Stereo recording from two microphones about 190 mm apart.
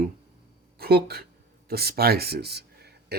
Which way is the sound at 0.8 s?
55° right (ahead or behind).